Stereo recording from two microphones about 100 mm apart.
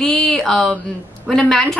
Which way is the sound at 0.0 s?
5° left (ahead or behind).